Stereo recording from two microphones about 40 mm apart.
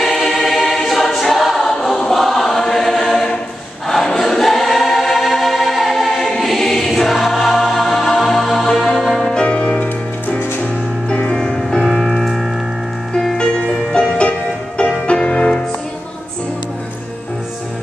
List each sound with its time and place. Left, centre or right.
0.0 s choir: centre
8.6 s music: centre
9.2 s music: left
9.7 s music: left
11.1 s music: left
11.9 s music: centre
13.9 s music: left